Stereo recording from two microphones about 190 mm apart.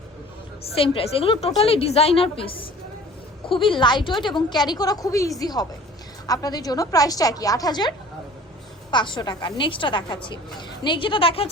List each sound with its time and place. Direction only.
0.6 s a woman's voice: 30° left (ahead or behind)